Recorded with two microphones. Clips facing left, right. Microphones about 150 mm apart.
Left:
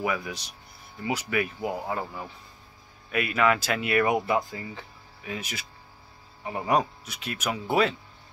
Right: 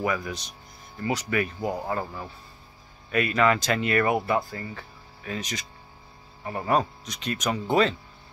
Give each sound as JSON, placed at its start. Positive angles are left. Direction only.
{"t": 0.0, "sound": "speech", "side_deg": 10}